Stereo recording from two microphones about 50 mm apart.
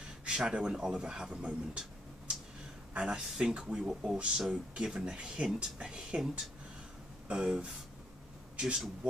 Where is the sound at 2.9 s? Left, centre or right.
Centre.